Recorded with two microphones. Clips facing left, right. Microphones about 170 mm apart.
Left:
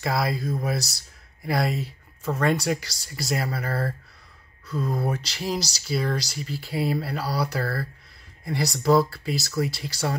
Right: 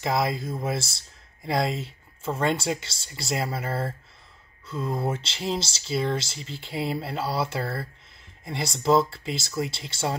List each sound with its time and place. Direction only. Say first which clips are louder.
0.0 s speech: even; 25° right (ahead or behind)